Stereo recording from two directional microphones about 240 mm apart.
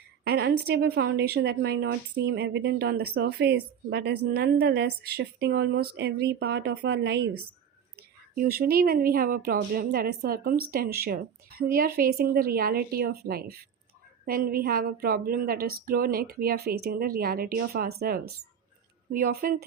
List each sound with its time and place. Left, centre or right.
0.3 s a woman's voice: right
8.4 s a woman's voice: right